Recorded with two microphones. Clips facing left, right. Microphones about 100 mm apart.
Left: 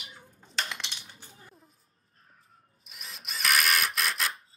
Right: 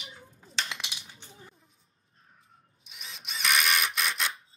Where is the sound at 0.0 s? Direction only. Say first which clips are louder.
Right 2 dB; centre (ahead or behind).